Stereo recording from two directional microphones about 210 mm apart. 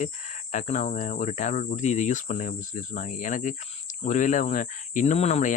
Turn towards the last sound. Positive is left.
turn(degrees=30)  # may be behind; listen again after turning